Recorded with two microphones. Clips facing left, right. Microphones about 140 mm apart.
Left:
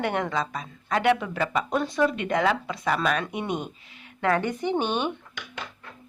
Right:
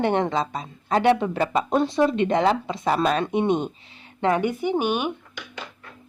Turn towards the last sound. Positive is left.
turn(degrees=-10)  # may be behind; listen again after turning